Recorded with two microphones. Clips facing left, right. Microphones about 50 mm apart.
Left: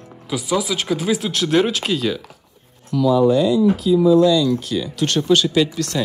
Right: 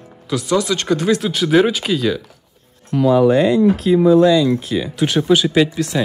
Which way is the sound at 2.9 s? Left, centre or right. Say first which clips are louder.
Right 2 dB; right.